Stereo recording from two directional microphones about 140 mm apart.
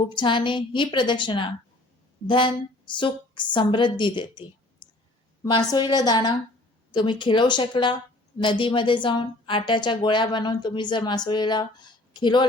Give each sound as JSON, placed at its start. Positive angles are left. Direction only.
{"t": 0.0, "sound": "a woman's voice", "side_deg": 35}